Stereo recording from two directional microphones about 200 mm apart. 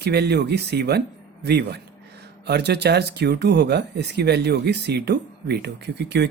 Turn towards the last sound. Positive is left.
turn(degrees=-55)  # may be behind; listen again after turning